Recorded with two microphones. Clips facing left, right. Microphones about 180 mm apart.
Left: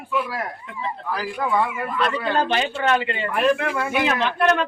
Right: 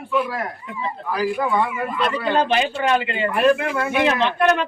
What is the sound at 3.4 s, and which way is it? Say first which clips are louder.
A man's voice: right 2 dB; centre (ahead or behind).